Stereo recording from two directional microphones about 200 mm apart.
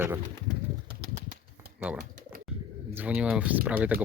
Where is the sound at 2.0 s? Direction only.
40° right (ahead or behind).